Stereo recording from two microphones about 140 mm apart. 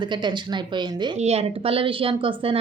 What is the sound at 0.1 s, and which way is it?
A woman's voice, 35° right (ahead or behind).